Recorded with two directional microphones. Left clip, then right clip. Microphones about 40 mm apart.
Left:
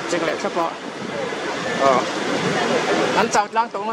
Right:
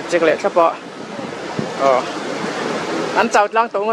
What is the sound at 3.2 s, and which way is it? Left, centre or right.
Speech, right.